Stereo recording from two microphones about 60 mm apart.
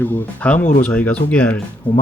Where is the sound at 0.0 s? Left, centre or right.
Left.